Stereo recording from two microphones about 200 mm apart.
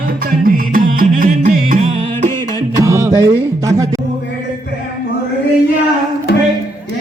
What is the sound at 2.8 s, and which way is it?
Music, 15° right (ahead or behind).